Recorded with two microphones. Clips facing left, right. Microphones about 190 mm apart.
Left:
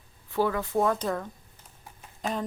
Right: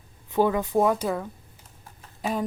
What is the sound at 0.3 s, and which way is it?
Speech, 20° right (ahead or behind).